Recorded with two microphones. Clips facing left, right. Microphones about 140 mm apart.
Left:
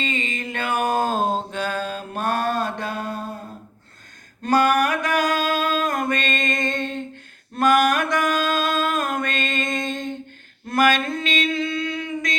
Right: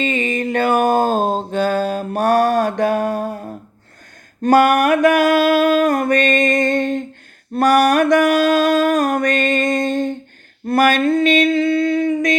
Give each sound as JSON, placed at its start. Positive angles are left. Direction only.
{"t": 0.0, "sound": "music", "side_deg": -50}
{"t": 2.4, "sound": "mantra", "side_deg": -90}
{"t": 2.6, "sound": "mantra", "side_deg": -45}
{"t": 3.1, "sound": "a sound", "side_deg": -90}
{"t": 4.4, "sound": "a sound", "side_deg": -50}
{"t": 6.1, "sound": "music", "side_deg": -50}
{"t": 7.5, "sound": "music", "side_deg": -35}
{"t": 8.2, "sound": "music", "side_deg": -65}
{"t": 8.8, "sound": "music", "side_deg": -40}
{"t": 9.6, "sound": "a sound", "side_deg": -35}
{"t": 11.2, "sound": "music", "side_deg": -55}
{"t": 11.4, "sound": "a sound", "side_deg": -35}